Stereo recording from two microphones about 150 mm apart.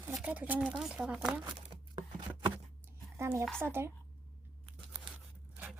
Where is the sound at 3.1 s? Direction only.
20° right (ahead or behind).